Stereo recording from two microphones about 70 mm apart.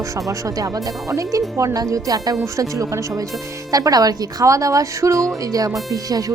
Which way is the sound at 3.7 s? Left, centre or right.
Right.